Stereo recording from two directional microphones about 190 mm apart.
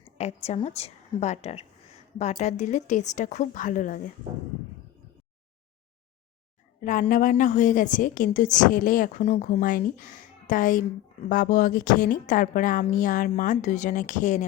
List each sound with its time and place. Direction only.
0.2 s a woman's voice: 35° left (ahead or behind)
6.8 s a woman's voice: 45° left (ahead or behind)